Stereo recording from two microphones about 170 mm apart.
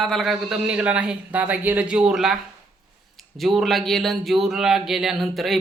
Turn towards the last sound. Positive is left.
turn(degrees=0)  # may be behind; listen again after turning